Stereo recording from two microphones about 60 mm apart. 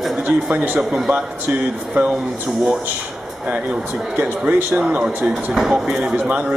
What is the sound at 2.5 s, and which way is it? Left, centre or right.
Speech, centre.